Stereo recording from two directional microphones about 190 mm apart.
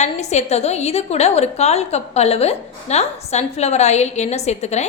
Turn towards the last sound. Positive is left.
turn(degrees=35)  # may be behind; listen again after turning